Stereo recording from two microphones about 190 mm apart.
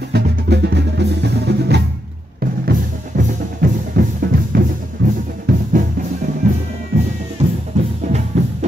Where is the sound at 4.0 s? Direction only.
55° right (ahead or behind).